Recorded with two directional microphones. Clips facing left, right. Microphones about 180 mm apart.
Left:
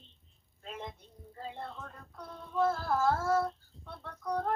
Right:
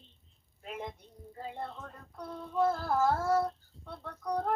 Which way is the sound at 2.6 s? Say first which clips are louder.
Right 1 dB; 15° right (ahead or behind).